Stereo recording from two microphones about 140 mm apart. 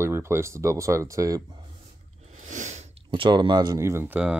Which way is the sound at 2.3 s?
55° right (ahead or behind).